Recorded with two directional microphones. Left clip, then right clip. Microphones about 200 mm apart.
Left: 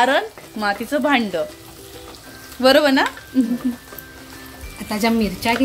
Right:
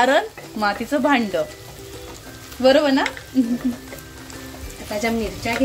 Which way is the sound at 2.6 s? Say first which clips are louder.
Left 2 dB; 15° left (ahead or behind).